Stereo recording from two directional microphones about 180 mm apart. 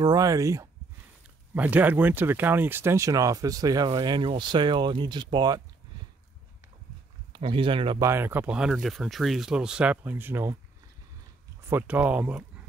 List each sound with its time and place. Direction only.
0.0 s speech: 20° right (ahead or behind)
7.3 s speech: 30° right (ahead or behind)
8.0 s speech: 15° right (ahead or behind)
11.7 s speech: 10° right (ahead or behind)